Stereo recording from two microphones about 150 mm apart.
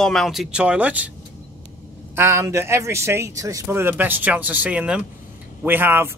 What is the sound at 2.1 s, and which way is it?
Speech, 15° right (ahead or behind).